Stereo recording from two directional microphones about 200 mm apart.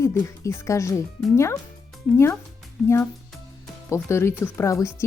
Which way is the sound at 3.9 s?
15° left (ahead or behind).